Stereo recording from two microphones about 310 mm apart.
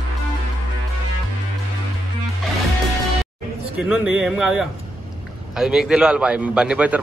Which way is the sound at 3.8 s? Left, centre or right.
Centre.